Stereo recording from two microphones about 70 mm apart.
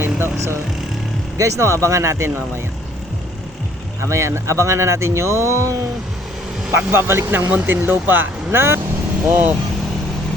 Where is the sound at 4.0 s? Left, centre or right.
Right.